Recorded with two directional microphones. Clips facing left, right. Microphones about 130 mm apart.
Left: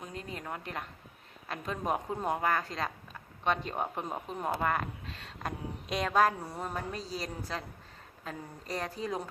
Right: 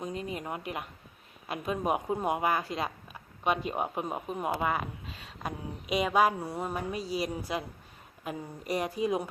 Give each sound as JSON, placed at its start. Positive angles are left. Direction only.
{"t": 0.0, "sound": "a woman's voice", "side_deg": -15}